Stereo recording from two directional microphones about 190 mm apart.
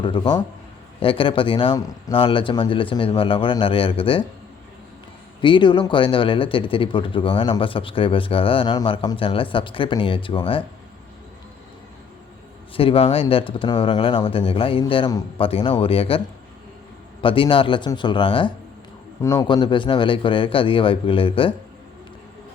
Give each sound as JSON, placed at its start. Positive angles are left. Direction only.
{"t": 0.0, "sound": "speech", "side_deg": 25}
{"t": 5.4, "sound": "speech", "side_deg": 25}
{"t": 12.7, "sound": "speech", "side_deg": 30}